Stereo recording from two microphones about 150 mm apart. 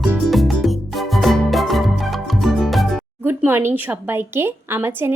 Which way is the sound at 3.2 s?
15° right (ahead or behind).